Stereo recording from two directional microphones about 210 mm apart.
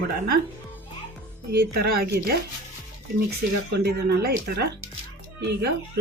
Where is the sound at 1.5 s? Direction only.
50° right (ahead or behind).